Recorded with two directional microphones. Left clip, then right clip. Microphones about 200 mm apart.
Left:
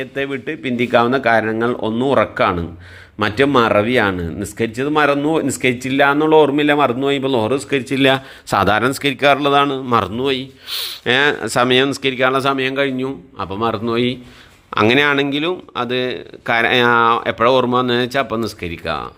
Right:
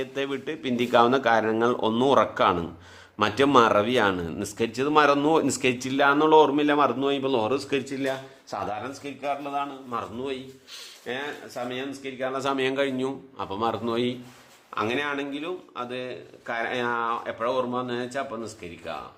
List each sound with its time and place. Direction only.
0.0 s speech: centre (ahead or behind)
7.9 s speech: 30° left (ahead or behind)
12.4 s a man's voice: 15° left (ahead or behind)
14.7 s speech: 40° left (ahead or behind)